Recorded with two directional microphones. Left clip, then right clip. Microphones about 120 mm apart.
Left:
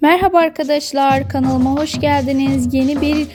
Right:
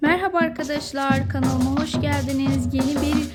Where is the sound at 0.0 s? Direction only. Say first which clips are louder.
Left 8 dB; 60° left (ahead or behind).